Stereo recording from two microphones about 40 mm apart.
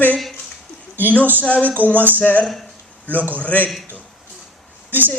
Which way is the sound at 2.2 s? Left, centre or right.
Left.